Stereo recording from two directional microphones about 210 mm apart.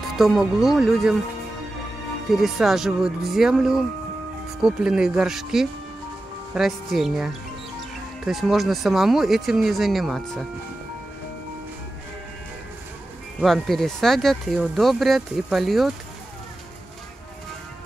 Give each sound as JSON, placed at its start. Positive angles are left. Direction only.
{"t": 0.1, "sound": "speech", "side_deg": 0}
{"t": 2.3, "sound": "speech", "side_deg": 0}
{"t": 8.3, "sound": "speech", "side_deg": 0}
{"t": 13.4, "sound": "speech", "side_deg": 0}